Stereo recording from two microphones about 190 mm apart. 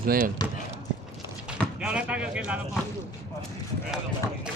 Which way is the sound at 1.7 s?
5° right (ahead or behind).